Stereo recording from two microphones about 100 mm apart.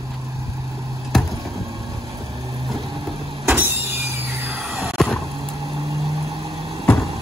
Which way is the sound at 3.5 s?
20° right (ahead or behind).